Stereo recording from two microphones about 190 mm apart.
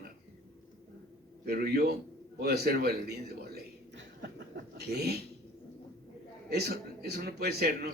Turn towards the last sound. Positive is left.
turn(degrees=-55)  # may be behind; listen again after turning